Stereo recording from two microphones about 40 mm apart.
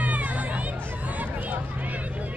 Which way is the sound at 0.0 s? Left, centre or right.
Right.